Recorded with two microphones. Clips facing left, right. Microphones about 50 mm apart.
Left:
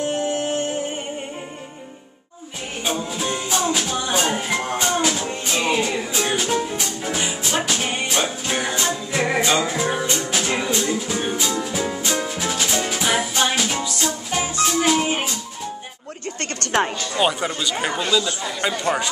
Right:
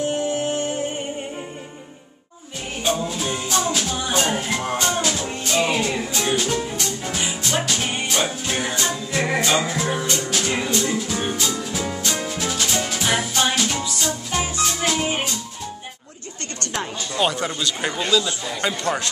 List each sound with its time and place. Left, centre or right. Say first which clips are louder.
0.1 s music: even; centre
2.8 s music: right 1 dB; centre
8.7 s music: left 1 dB; centre
9.5 s music: left 1 dB; centre
9.8 s music: left 1 dB; centre
16.5 s a sound: left 7 dB; left
17.1 s speech: right 3 dB; centre